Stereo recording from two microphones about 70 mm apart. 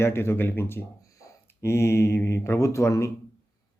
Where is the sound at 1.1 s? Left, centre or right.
Left.